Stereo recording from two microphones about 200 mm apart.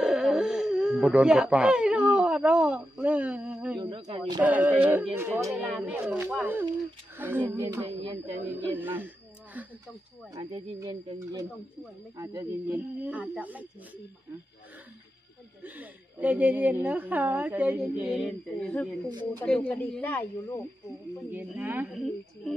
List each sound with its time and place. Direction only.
0.0 s a sound: centre (ahead or behind)
3.8 s speech: 30° right (ahead or behind)
4.4 s a woman's voice: 10° right (ahead or behind)
8.7 s a sound: 10° right (ahead or behind)
10.3 s a woman's voice: 25° right (ahead or behind); by 13.7 s 5° right (ahead or behind)
15.6 s a woman's voice: 10° right (ahead or behind); by 20.6 s 10° left (ahead or behind)
21.3 s a woman's voice: 10° right (ahead or behind)